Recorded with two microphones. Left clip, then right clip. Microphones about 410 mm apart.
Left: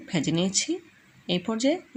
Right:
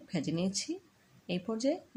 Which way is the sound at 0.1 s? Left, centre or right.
Left.